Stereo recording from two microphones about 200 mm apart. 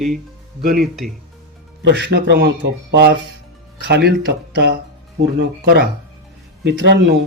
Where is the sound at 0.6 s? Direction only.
50° right (ahead or behind).